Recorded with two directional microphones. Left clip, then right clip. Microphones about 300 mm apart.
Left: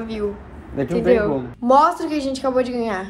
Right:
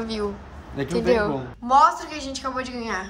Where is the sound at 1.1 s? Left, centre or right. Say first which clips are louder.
Left 4 dB; centre.